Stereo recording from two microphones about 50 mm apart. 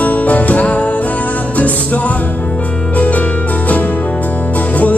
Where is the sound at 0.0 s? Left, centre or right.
Left.